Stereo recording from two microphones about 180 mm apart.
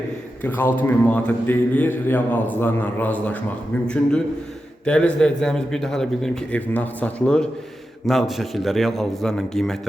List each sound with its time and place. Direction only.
0.4 s speech: 10° left (ahead or behind)
4.9 s a man's voice: 5° left (ahead or behind)